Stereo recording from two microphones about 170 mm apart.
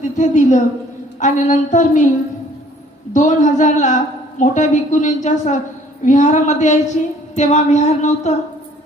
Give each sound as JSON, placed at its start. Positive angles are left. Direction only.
{"t": 0.0, "sound": "a woman's voice", "side_deg": 45}
{"t": 3.1, "sound": "a woman's voice", "side_deg": 45}